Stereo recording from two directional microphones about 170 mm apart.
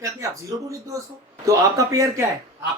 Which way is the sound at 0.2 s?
20° right (ahead or behind).